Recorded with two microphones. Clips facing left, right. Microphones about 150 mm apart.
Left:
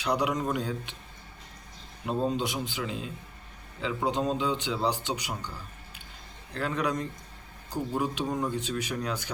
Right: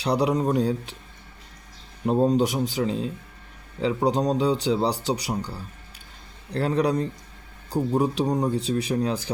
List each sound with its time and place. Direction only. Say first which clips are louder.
0.0 s a man's voice: right 6 dB; 35° right (ahead or behind)
2.0 s a man's voice: right 8 dB; 40° right (ahead or behind)